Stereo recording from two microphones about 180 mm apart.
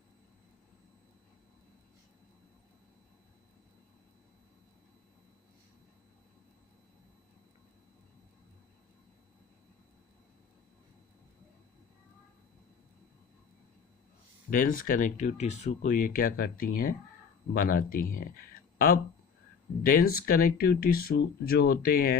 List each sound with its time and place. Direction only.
14.5 s speech: 50° left (ahead or behind)
19.8 s speech: 55° left (ahead or behind)